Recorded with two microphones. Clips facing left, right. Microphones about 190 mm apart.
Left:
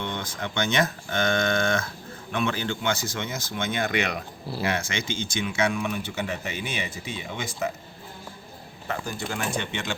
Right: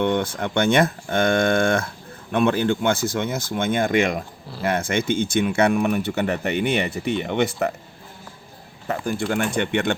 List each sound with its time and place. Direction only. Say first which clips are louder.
0.0 s speech: right 10 dB; 55° right (ahead or behind)
8.9 s speech: right 7 dB; 55° right (ahead or behind)